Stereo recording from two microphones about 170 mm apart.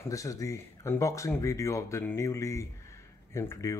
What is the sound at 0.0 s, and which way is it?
Speech, 20° left (ahead or behind).